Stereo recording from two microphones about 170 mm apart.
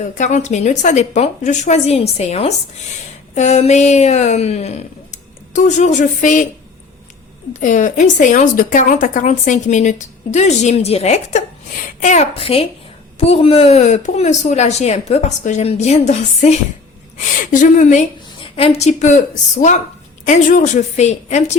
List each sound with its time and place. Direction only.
0.0 s a woman's voice: 45° left (ahead or behind)
7.5 s a woman's voice: 45° left (ahead or behind)